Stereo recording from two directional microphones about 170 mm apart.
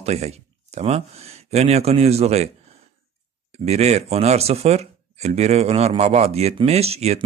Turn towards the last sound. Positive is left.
turn(degrees=-40)  # may be behind; listen again after turning